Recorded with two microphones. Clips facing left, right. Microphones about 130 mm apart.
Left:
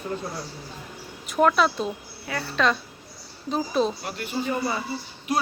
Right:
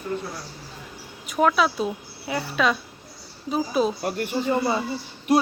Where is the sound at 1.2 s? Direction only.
Centre (ahead or behind).